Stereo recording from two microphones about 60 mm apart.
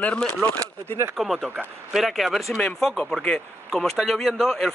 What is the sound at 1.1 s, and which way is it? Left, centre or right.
Speech, centre.